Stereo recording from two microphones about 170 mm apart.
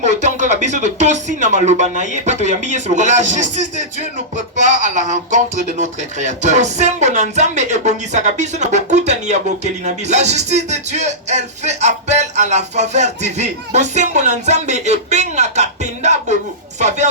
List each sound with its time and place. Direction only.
0.0 s speech: 45° right (ahead or behind)